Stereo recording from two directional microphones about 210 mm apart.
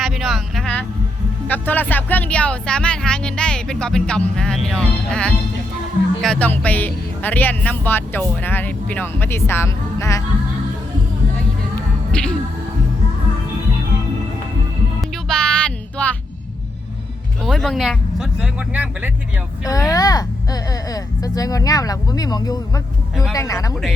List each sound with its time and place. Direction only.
0.0 s vehicle: centre (ahead or behind)
1.5 s speech: 10° left (ahead or behind)
12.1 s speech: 5° left (ahead or behind)
15.1 s music: 5° left (ahead or behind)
17.4 s speech: centre (ahead or behind)
19.6 s speech: 15° left (ahead or behind)